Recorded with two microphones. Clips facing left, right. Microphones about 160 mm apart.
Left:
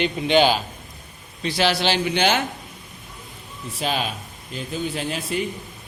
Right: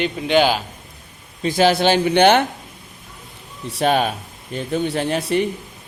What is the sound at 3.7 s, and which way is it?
Speech, 60° right (ahead or behind).